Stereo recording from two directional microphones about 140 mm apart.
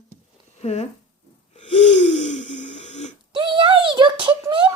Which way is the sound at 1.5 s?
50° left (ahead or behind).